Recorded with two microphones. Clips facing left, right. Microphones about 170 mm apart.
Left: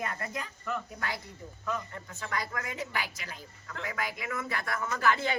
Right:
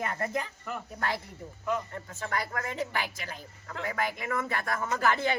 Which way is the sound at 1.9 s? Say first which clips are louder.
Right 3 dB; 35° right (ahead or behind).